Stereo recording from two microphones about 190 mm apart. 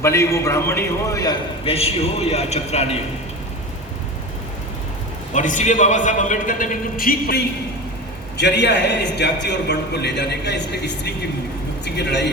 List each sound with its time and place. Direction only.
0.0 s a man's voice: 15° left (ahead or behind)
1.6 s a man's voice: 30° left (ahead or behind)
5.3 s a man's voice: 40° left (ahead or behind)
8.4 s a man's voice: 65° left (ahead or behind)